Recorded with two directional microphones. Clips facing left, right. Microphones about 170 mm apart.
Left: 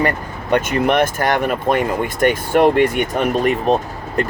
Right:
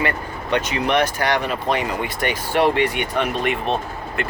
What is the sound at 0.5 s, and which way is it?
Speech, 50° left (ahead or behind).